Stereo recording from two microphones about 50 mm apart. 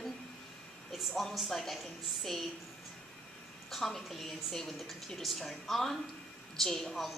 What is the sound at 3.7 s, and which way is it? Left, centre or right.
A woman's voice, centre.